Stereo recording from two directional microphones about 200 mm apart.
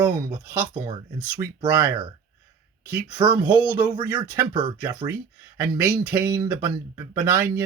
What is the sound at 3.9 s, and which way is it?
Speech, 20° right (ahead or behind).